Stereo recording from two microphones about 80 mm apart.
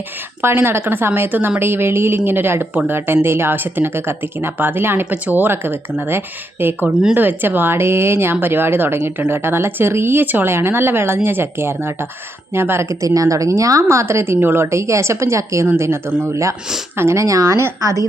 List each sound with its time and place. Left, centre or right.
0.4 s a woman's voice: right
6.8 s speech: centre
7.2 s a woman's voice: right